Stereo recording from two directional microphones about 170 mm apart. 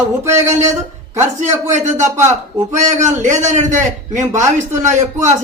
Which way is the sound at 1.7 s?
45° right (ahead or behind).